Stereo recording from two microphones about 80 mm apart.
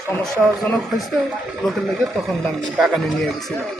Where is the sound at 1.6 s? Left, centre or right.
Centre.